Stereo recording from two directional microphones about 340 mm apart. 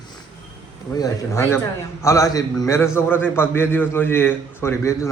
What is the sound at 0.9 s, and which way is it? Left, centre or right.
A man's voice, centre.